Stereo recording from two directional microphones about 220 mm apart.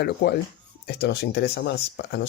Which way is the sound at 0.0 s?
50° left (ahead or behind).